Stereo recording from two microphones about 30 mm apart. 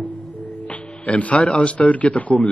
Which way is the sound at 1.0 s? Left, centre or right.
Left.